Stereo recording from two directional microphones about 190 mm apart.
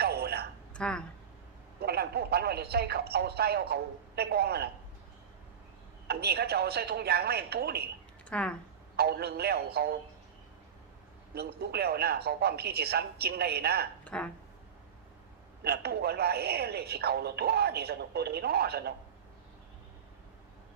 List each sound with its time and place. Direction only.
0.0 s a sound: 55° right (ahead or behind)
0.7 s speech: 5° left (ahead or behind)
1.8 s speech: 55° right (ahead or behind)
6.1 s speech: 55° right (ahead or behind)
8.3 s speech: 5° left (ahead or behind)
9.0 s speech: 55° right (ahead or behind)
11.3 s speech: 55° right (ahead or behind)
14.0 s a woman's voice: 5° left (ahead or behind)
15.6 s speech: 55° right (ahead or behind)